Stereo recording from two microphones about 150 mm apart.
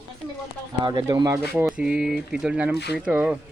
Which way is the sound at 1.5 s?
5° right (ahead or behind).